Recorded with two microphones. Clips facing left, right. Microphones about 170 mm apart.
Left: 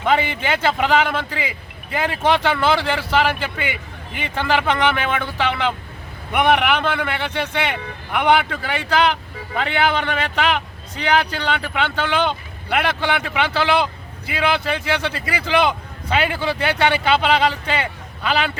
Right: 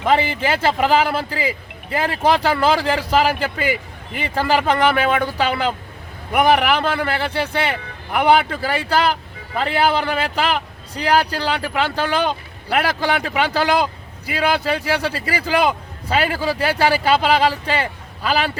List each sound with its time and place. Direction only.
0.1 s a man's voice: 30° right (ahead or behind)